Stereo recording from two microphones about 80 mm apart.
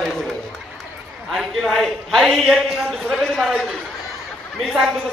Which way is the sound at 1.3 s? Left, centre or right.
Centre.